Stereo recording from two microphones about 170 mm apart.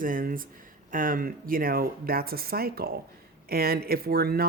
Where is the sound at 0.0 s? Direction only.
55° right (ahead or behind).